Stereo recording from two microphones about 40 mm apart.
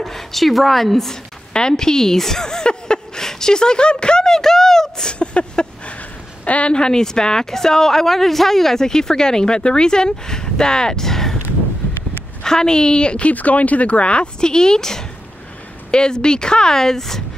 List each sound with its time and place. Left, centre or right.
0.0 s a woman's voice: centre
1.5 s speech: left
5.2 s a sound: left
6.4 s speech: left
6.7 s a woman's voice: centre
12.4 s speech: centre
13.3 s speech: left; by 17.2 s centre